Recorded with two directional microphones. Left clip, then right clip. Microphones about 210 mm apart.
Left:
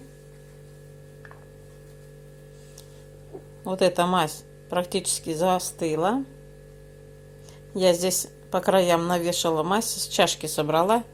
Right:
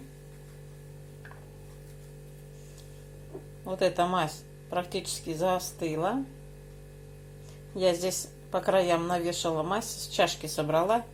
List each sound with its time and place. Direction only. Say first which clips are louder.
3.6 s a woman's voice: left 5 dB; 40° left (ahead or behind)
7.8 s a woman's voice: left 5 dB; 40° left (ahead or behind)